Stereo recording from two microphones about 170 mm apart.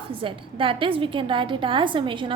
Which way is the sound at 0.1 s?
30° right (ahead or behind).